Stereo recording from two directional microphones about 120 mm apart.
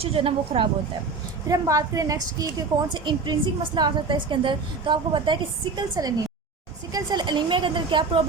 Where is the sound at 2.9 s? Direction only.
40° right (ahead or behind).